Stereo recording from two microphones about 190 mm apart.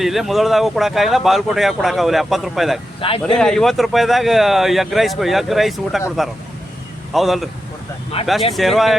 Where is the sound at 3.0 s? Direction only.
30° left (ahead or behind).